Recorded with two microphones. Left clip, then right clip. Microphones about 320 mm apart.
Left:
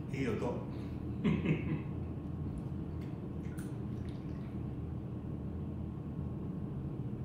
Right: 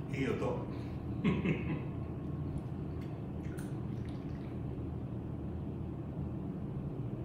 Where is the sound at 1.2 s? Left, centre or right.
Centre.